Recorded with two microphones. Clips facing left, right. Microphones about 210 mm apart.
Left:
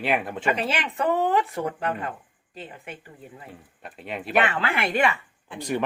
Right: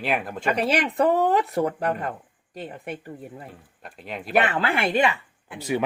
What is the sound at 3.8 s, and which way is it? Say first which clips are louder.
Speech: left 1 dB; 5° left (ahead or behind).